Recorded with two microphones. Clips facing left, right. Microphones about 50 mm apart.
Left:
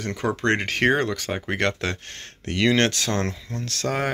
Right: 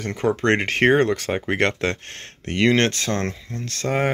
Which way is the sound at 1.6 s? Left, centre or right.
Right.